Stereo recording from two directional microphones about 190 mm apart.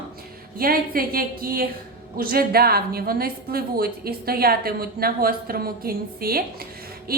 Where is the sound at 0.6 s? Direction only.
50° right (ahead or behind).